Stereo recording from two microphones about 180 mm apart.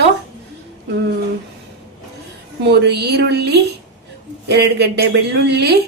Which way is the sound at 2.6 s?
65° right (ahead or behind).